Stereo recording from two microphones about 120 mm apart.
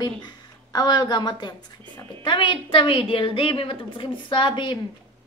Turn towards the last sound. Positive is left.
turn(degrees=40)  # may be behind; listen again after turning